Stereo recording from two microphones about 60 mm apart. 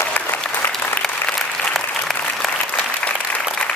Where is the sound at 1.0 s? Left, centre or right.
Centre.